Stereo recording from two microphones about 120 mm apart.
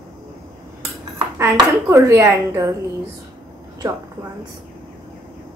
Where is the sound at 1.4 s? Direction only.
25° right (ahead or behind).